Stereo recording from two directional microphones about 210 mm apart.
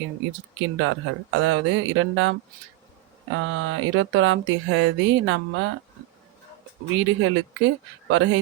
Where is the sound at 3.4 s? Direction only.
65° right (ahead or behind).